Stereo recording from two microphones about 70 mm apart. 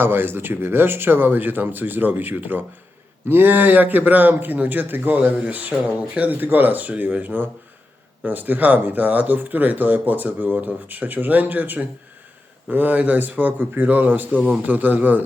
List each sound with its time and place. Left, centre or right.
0.0 s speech: right